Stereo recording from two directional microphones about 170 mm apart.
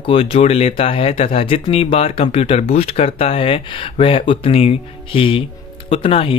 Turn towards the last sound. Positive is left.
turn(degrees=35)  # may be behind; listen again after turning